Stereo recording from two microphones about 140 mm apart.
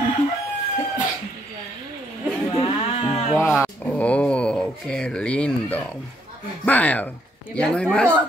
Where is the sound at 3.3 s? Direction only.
20° left (ahead or behind).